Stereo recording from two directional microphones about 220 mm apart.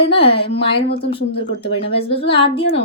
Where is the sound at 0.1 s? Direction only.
25° left (ahead or behind).